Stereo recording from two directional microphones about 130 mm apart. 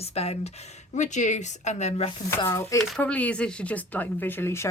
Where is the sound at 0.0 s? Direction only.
50° left (ahead or behind).